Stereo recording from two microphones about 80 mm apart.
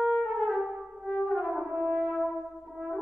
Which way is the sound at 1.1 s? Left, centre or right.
Centre.